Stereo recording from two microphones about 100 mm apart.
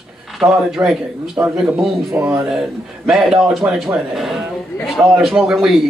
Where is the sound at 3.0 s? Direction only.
5° right (ahead or behind).